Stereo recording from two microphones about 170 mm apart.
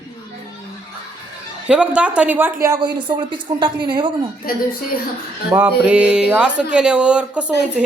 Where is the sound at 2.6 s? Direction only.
25° right (ahead or behind).